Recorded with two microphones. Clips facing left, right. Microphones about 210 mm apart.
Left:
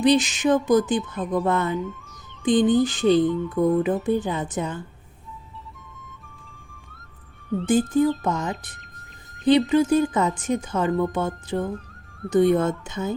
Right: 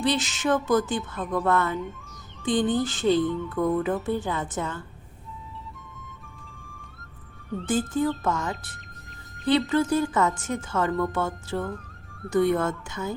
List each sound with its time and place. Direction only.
0.0 s speech: 15° left (ahead or behind)
7.7 s speech: 15° left (ahead or behind)